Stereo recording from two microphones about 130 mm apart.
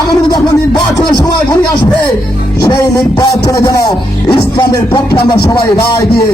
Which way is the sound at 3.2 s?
30° left (ahead or behind).